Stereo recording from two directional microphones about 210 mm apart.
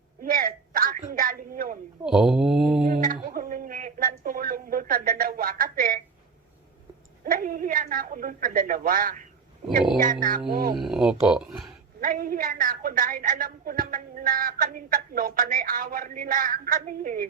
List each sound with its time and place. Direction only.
0.2 s a sound: 40° right (ahead or behind)
2.0 s speech: centre (ahead or behind)
2.8 s speech: 40° right (ahead or behind)
7.3 s a woman's voice: 40° right (ahead or behind)
10.8 s speech: centre (ahead or behind)
11.9 s a woman's voice: 40° right (ahead or behind)